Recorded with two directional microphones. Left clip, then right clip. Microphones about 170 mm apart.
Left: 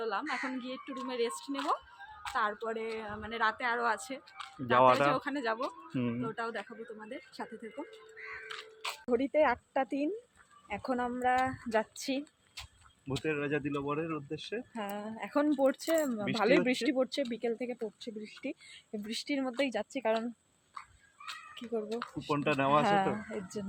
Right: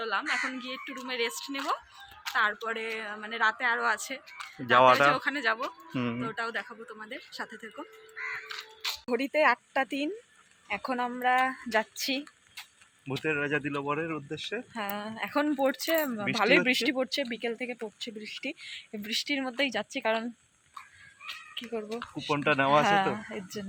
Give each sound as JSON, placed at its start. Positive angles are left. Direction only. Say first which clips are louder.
{"t": 0.0, "sound": "speech", "louder": "right 5 dB", "side_deg": 30}
{"t": 2.3, "sound": "speech", "louder": "right 5 dB", "side_deg": 15}
{"t": 4.4, "sound": "speech", "louder": "right 4 dB", "side_deg": 0}
{"t": 5.1, "sound": "speech", "louder": "right 5 dB", "side_deg": 25}
{"t": 5.9, "sound": "speech", "louder": "right 3 dB", "side_deg": -5}
{"t": 6.2, "sound": "speech", "louder": "right 4 dB", "side_deg": 20}
{"t": 7.8, "sound": "speech", "louder": "right 5 dB", "side_deg": 10}
{"t": 13.2, "sound": "speech", "louder": "right 4 dB", "side_deg": -10}
{"t": 14.7, "sound": "speech", "louder": "right 4 dB", "side_deg": 5}
{"t": 21.7, "sound": "speech", "louder": "left 1 dB", "side_deg": 5}
{"t": 22.3, "sound": "speech", "louder": "right 4 dB", "side_deg": -20}
{"t": 22.8, "sound": "speech", "louder": "right 4 dB", "side_deg": 5}